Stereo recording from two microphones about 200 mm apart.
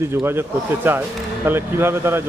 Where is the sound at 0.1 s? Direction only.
10° right (ahead or behind).